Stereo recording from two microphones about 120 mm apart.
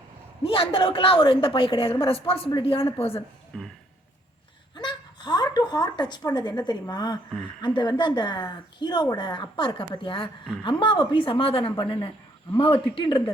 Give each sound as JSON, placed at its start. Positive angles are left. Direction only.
{"t": 0.4, "sound": "a woman's voice", "side_deg": 50}
{"t": 3.5, "sound": "speech", "side_deg": 5}
{"t": 4.7, "sound": "a woman's voice", "side_deg": 40}